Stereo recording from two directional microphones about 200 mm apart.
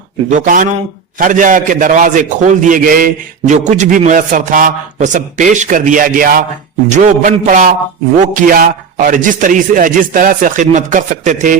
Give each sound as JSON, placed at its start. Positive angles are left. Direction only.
{"t": 0.3, "sound": "a man's voice", "side_deg": -40}